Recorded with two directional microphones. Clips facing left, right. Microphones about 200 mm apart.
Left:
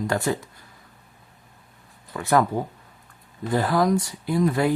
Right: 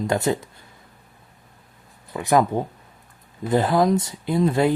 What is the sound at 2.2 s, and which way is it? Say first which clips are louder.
Speech: right 2 dB; 15° right (ahead or behind).